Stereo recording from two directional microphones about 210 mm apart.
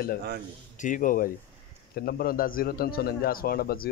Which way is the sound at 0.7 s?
35° left (ahead or behind).